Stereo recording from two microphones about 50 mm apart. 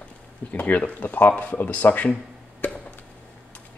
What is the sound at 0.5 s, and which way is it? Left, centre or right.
Speech, left.